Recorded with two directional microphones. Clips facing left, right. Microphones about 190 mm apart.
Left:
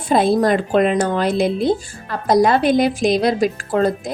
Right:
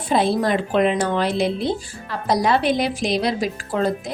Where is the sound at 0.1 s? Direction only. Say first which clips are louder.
Left 4 dB; 45° left (ahead or behind).